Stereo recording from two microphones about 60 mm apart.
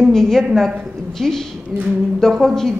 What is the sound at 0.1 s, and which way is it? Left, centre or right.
Speech, centre.